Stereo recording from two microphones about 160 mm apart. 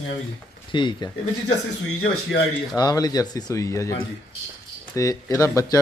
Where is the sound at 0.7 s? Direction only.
30° left (ahead or behind).